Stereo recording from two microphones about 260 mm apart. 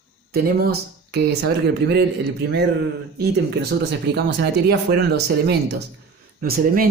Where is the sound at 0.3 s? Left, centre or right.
Right.